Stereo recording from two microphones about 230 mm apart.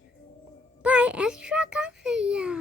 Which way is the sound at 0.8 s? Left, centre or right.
Centre.